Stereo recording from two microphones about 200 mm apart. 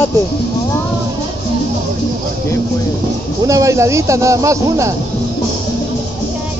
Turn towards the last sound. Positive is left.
turn(degrees=-15)  # may be behind; listen again after turning